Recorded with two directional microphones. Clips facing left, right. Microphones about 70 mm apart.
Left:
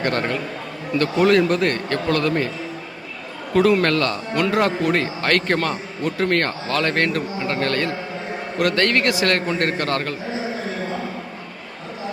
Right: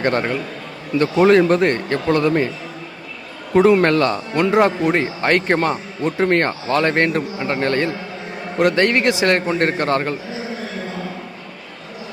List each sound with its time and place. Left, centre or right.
0.0 s a man's voice: right
3.5 s a man's voice: right